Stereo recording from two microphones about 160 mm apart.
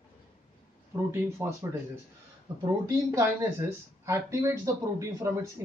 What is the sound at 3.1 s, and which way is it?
Speech, 15° right (ahead or behind).